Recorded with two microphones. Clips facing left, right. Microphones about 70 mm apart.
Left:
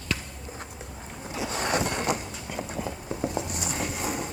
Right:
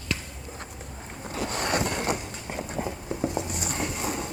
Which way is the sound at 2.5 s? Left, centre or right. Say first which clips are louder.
Even; right.